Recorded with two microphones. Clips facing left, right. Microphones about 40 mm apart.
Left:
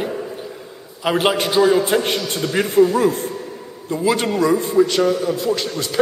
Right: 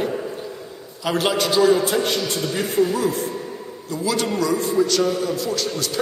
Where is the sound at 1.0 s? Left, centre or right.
Left.